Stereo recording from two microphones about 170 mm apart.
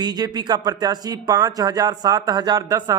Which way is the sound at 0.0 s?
25° right (ahead or behind).